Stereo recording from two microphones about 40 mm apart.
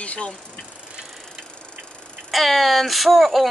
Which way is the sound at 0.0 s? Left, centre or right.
Left.